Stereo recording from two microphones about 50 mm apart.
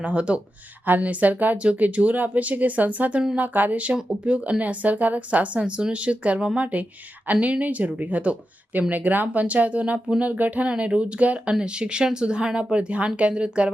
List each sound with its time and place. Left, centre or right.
0.0 s a woman's voice: right